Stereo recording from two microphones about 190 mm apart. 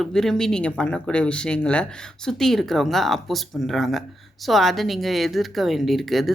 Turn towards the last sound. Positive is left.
turn(degrees=0)  # may be behind; listen again after turning